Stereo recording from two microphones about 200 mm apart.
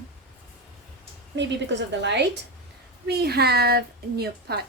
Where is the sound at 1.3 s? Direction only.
60° right (ahead or behind).